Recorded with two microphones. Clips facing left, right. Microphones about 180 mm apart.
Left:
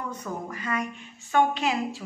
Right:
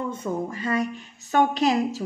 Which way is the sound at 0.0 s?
25° right (ahead or behind).